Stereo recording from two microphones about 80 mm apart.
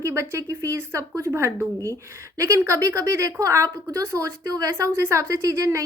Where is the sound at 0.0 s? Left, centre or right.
Right.